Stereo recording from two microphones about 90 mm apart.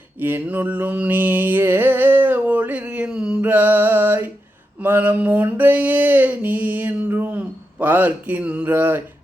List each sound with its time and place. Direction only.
0.2 s mantra: 20° right (ahead or behind)
3.4 s music: 20° right (ahead or behind)
4.8 s a sound: 20° right (ahead or behind)